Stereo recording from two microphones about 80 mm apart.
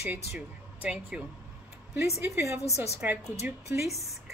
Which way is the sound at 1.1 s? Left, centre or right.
Centre.